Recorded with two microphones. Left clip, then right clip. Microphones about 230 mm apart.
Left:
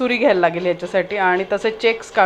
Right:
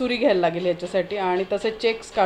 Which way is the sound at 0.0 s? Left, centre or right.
Centre.